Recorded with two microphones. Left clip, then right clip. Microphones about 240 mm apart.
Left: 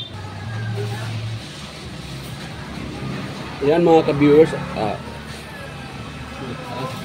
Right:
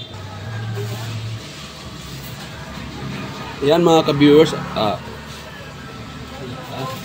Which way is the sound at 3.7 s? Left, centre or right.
Right.